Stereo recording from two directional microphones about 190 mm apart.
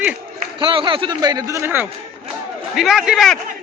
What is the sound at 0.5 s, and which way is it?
A man's voice, 25° right (ahead or behind).